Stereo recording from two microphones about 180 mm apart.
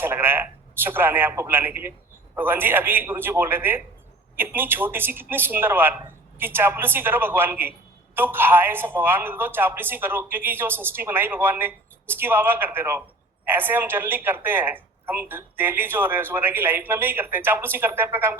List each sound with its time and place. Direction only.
0.0 s speech: 10° right (ahead or behind)